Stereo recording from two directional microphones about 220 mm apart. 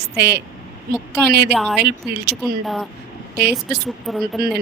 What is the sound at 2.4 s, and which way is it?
Speech, centre (ahead or behind).